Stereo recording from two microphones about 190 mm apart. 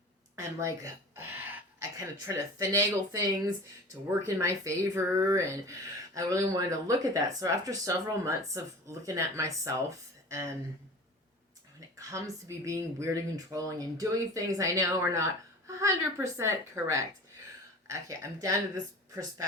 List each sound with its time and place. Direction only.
0.3 s speech: 15° right (ahead or behind)
11.9 s speech: 15° right (ahead or behind)